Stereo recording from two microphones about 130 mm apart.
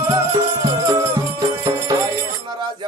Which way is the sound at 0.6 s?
30° right (ahead or behind).